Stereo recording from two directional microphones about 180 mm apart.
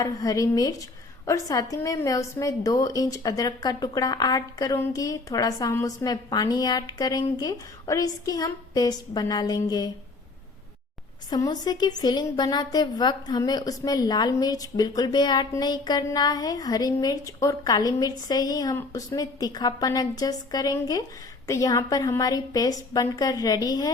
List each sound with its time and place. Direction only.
0.0 s a woman's voice: 20° left (ahead or behind)
11.3 s a woman's voice: 20° left (ahead or behind)